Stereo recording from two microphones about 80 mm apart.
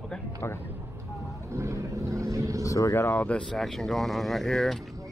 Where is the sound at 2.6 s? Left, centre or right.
Left.